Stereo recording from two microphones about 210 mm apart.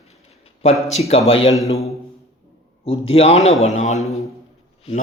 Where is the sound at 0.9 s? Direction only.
30° left (ahead or behind).